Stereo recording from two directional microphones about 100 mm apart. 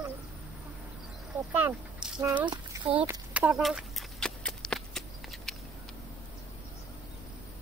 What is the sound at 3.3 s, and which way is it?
Speech, 5° right (ahead or behind).